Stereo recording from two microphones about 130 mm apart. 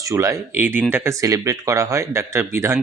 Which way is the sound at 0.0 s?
25° right (ahead or behind).